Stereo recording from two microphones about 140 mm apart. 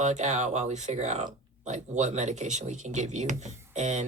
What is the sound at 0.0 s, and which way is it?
Speech, 55° right (ahead or behind).